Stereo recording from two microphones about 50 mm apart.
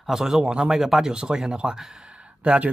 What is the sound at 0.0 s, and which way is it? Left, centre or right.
Speech, centre.